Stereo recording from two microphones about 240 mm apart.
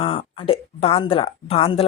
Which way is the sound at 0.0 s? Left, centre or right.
Left.